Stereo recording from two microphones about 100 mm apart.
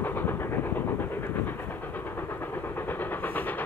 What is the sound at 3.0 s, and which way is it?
Train, 20° left (ahead or behind).